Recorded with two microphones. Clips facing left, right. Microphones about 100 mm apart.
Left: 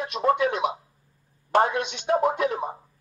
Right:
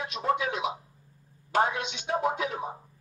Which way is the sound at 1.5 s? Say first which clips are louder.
Left 5 dB; 50° left (ahead or behind).